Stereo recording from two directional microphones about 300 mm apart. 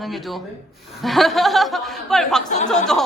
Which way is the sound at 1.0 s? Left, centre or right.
Centre.